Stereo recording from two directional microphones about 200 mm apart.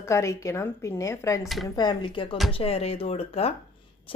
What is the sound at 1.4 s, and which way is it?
Speech, centre (ahead or behind).